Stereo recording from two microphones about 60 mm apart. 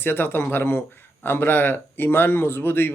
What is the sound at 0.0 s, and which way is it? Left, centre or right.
A man's voice, left.